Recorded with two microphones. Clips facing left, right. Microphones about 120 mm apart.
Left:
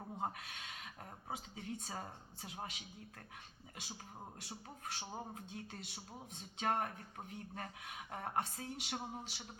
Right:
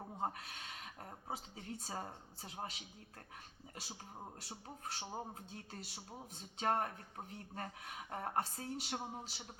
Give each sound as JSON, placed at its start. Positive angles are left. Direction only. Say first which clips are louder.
{"t": 0.2, "sound": "speech", "louder": "right 2 dB", "side_deg": -35}
{"t": 4.4, "sound": "speech", "louder": "even", "side_deg": -35}